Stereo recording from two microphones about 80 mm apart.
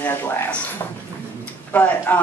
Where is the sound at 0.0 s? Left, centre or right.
Left.